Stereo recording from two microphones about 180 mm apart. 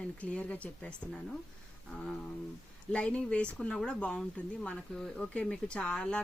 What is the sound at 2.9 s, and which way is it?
Speech, 5° left (ahead or behind).